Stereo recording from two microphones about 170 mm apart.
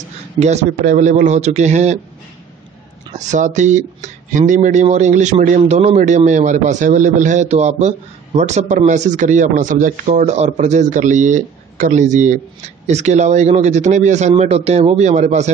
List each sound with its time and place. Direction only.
0.4 s speech: 40° right (ahead or behind)
3.3 s speech: 45° right (ahead or behind)